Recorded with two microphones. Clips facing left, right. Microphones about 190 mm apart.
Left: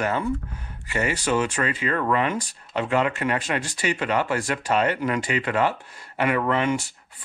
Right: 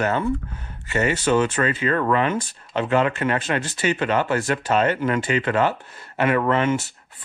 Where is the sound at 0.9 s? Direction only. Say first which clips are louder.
Right 4 dB; 10° left (ahead or behind).